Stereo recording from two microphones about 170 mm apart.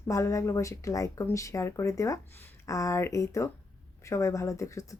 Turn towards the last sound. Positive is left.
turn(degrees=20)  # may be behind; listen again after turning